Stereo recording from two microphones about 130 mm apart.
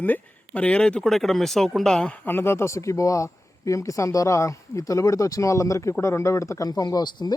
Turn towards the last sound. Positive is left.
turn(degrees=30)  # may be behind; listen again after turning